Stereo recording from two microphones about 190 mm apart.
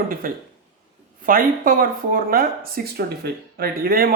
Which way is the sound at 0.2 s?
50° right (ahead or behind).